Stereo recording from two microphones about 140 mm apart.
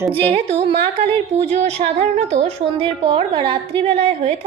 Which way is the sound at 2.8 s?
35° right (ahead or behind).